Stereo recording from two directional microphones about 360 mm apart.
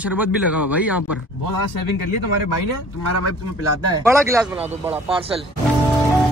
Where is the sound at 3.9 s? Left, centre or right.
Centre.